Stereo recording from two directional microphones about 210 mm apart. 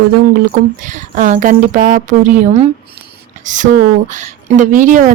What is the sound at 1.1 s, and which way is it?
Speech, 35° right (ahead or behind).